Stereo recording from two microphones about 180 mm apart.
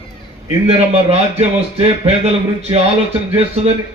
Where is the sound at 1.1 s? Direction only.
35° right (ahead or behind).